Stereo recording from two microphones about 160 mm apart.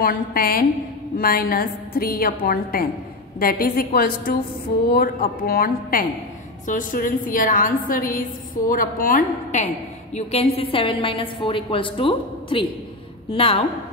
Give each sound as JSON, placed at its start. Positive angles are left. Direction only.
{"t": 0.0, "sound": "a woman's voice", "side_deg": 65}
{"t": 6.6, "sound": "a woman's voice", "side_deg": 55}
{"t": 10.1, "sound": "a woman's voice", "side_deg": 40}